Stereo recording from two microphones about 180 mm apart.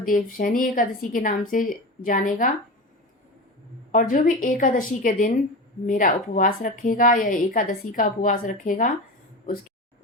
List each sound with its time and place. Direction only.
0.0 s a woman's voice: 50° left (ahead or behind)
3.9 s a woman's voice: 45° left (ahead or behind)